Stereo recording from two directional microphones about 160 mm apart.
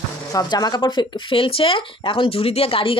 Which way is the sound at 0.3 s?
25° left (ahead or behind).